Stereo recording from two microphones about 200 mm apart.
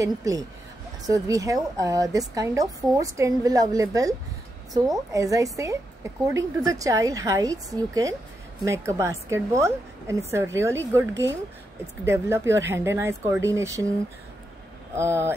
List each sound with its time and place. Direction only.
0.0 s a woman's voice: 15° right (ahead or behind)
5.1 s a woman's voice: 15° right (ahead or behind)
15.0 s a woman's voice: 10° right (ahead or behind)